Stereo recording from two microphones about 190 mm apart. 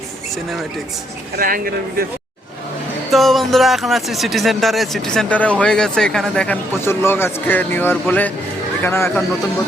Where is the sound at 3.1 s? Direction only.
Centre (ahead or behind).